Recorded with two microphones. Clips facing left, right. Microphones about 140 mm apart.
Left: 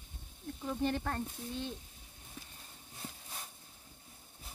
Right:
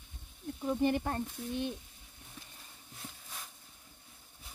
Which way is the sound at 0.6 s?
15° right (ahead or behind).